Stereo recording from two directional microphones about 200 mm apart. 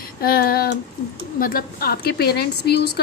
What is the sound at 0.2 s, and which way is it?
A woman's voice, 50° left (ahead or behind).